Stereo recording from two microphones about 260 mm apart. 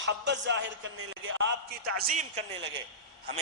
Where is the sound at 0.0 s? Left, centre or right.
Right.